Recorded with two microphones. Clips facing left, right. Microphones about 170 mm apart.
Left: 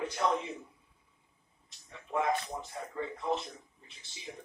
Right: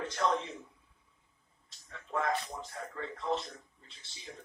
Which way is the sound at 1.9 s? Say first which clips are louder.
Left 2 dB; 15° left (ahead or behind).